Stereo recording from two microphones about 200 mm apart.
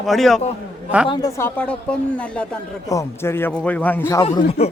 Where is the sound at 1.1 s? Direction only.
20° left (ahead or behind).